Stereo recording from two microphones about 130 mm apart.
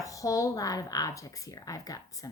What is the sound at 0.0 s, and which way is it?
Speech, 25° left (ahead or behind).